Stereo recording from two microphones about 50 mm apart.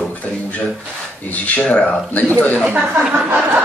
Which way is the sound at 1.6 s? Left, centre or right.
Centre.